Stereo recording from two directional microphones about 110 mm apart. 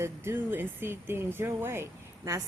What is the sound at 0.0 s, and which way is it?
Speech, 20° right (ahead or behind).